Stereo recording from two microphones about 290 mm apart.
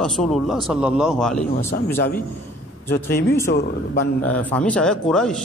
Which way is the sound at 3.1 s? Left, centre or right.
Left.